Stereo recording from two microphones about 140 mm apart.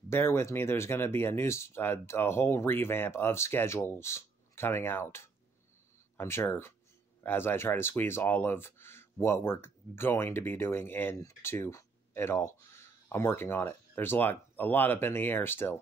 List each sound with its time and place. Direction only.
0.1 s speech: 15° left (ahead or behind)